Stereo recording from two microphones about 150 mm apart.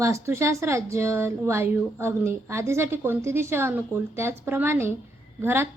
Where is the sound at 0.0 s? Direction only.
20° right (ahead or behind).